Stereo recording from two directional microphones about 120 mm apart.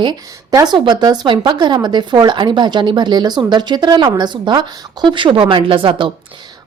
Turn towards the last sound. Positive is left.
turn(degrees=-45)  # may be behind; listen again after turning